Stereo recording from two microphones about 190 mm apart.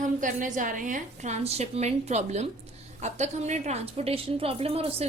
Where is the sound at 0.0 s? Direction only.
45° right (ahead or behind).